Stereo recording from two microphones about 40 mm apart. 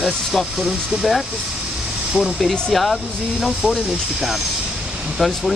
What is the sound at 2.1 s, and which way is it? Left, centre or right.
Speech, centre.